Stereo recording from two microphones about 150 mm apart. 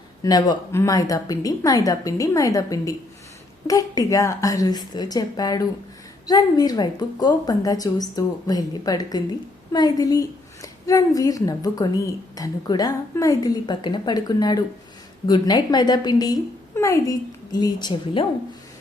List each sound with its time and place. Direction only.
0.2 s a woman's voice: 25° left (ahead or behind)